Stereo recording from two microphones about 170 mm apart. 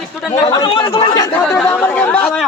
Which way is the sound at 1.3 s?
10° left (ahead or behind).